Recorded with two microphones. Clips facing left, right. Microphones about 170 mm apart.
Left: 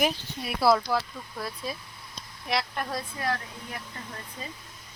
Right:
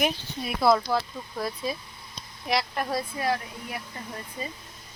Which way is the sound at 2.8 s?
15° right (ahead or behind).